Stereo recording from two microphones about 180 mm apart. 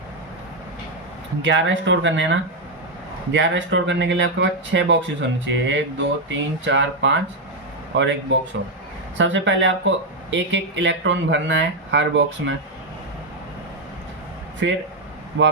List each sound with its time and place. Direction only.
1.4 s speech: 90° right
14.6 s speech: 85° right